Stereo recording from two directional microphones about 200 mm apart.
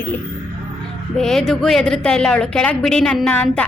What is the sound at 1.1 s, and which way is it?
A woman's voice, centre (ahead or behind).